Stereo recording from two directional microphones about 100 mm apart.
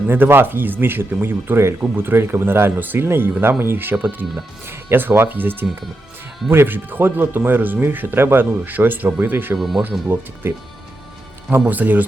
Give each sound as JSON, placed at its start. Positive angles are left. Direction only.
{"t": 0.1, "sound": "speech", "side_deg": -20}
{"t": 9.6, "sound": "speech", "side_deg": 0}
{"t": 10.4, "sound": "speech", "side_deg": -20}
{"t": 11.6, "sound": "speech", "side_deg": -15}